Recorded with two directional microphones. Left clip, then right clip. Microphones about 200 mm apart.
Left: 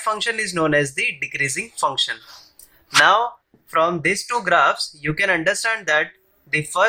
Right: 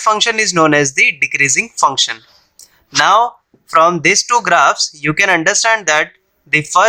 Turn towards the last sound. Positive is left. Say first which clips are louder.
# right 8 dB
turn(degrees=-40)  # may be behind; listen again after turning